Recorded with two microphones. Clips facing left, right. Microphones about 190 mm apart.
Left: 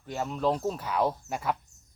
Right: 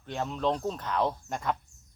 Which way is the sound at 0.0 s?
5° left (ahead or behind).